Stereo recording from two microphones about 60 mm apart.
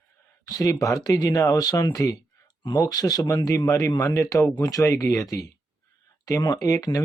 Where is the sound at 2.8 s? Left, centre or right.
Left.